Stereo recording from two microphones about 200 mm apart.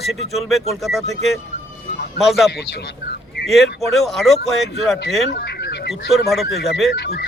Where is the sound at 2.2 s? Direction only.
Centre (ahead or behind).